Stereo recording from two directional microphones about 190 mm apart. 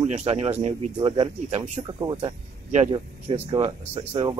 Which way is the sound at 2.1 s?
35° right (ahead or behind).